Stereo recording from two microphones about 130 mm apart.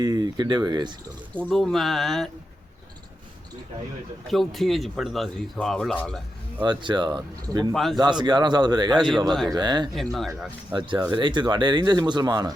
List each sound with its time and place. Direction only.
0.0 s speech: 30° right (ahead or behind)
1.4 s speech: 5° left (ahead or behind)
4.3 s speech: centre (ahead or behind)
6.6 s speech: 35° right (ahead or behind)
7.7 s speech: centre (ahead or behind)
8.2 s speech: 35° right (ahead or behind)
9.0 s speech: centre (ahead or behind)
9.5 s speech: 35° right (ahead or behind)
9.9 s speech: centre (ahead or behind)
10.7 s speech: 35° right (ahead or behind)